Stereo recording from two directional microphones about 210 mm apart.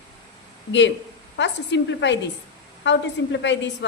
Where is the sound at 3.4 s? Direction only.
60° left (ahead or behind).